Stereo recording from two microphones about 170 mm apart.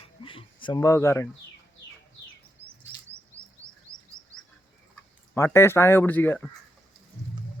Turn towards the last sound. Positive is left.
turn(degrees=10)  # may be behind; listen again after turning